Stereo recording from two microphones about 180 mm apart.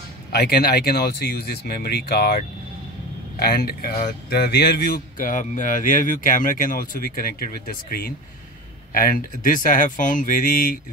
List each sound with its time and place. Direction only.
0.3 s speech: 65° left (ahead or behind)